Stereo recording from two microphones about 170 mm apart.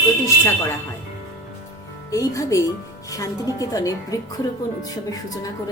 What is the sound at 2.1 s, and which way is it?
A woman's voice, 20° left (ahead or behind).